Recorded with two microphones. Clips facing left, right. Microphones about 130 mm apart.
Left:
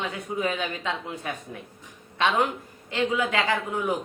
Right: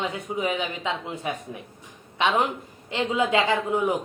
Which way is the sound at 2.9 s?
20° right (ahead or behind).